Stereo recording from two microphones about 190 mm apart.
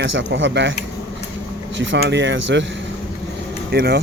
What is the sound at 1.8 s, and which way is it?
Speech, 70° right (ahead or behind).